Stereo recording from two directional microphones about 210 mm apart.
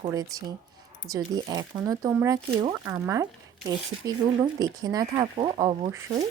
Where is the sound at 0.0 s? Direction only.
20° right (ahead or behind).